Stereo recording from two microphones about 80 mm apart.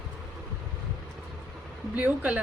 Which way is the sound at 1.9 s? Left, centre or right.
Centre.